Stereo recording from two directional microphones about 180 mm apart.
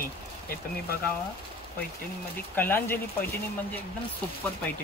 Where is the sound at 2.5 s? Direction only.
10° left (ahead or behind).